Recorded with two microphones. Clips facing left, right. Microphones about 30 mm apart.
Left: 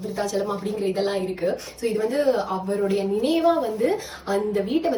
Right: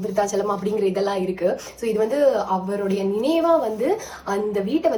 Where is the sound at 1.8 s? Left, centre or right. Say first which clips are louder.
Right 3 dB; left.